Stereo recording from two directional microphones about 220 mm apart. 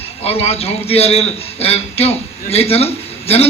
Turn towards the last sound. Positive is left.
turn(degrees=25)  # may be behind; listen again after turning